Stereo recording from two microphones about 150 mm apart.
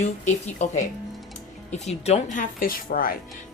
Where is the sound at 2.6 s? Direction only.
70° left (ahead or behind).